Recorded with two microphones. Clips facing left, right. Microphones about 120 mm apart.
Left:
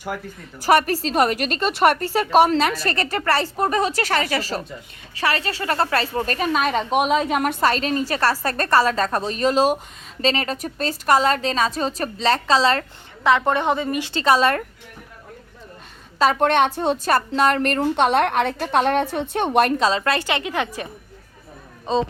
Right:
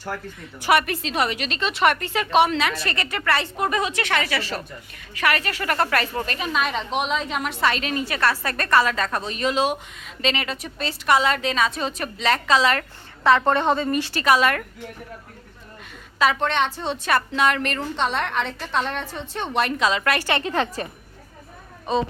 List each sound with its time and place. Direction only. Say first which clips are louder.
0.6 s a woman's voice: left 3 dB; 40° left (ahead or behind)
6.2 s a woman's voice: left 4 dB; 45° left (ahead or behind)
13.2 s a woman's voice: even; 15° left (ahead or behind); by 14.6 s 30° left (ahead or behind)
16.1 s a woman's voice: left 2 dB; 35° left (ahead or behind)
16.4 s a woman's voice: left 5 dB; 50° left (ahead or behind)
19.8 s a woman's voice: left 2 dB; 30° left (ahead or behind); by 20.8 s 10° left (ahead or behind)
21.9 s speech: left 2 dB; 25° left (ahead or behind)